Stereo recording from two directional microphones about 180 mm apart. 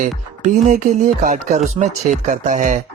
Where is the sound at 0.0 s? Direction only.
40° right (ahead or behind).